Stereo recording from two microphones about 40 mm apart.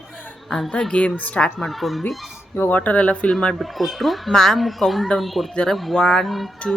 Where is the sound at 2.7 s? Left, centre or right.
Left.